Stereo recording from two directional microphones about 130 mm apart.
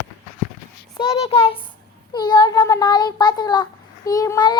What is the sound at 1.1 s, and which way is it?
Child singing, 50° left (ahead or behind).